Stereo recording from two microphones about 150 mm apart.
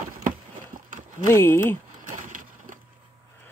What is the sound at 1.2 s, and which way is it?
Speech, 15° left (ahead or behind).